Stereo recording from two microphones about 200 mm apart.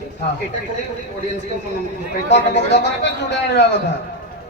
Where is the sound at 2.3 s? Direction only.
60° left (ahead or behind).